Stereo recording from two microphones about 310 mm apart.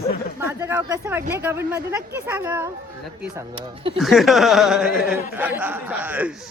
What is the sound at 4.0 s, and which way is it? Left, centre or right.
A man's voice, centre.